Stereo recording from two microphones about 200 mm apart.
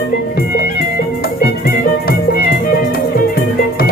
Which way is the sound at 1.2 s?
50° left (ahead or behind).